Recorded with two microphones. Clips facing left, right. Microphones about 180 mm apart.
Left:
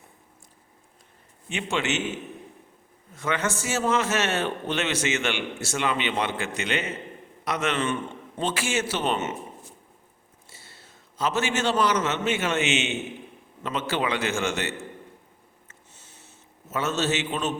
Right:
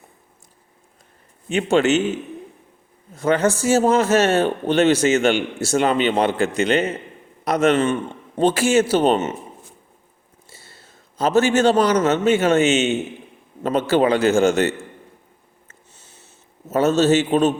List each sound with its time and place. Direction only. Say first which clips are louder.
1.5 s a man's voice: right 11 dB; 40° right (ahead or behind)
3.2 s a man's voice: right 10 dB; 35° right (ahead or behind)
11.2 s a man's voice: right 10 dB; 40° right (ahead or behind)
16.7 s a man's voice: right 11 dB; 35° right (ahead or behind)